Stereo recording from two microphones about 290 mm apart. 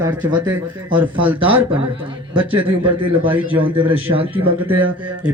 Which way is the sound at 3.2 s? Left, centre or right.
Centre.